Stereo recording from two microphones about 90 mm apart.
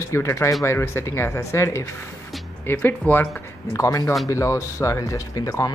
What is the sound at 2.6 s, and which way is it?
Speech, 20° left (ahead or behind).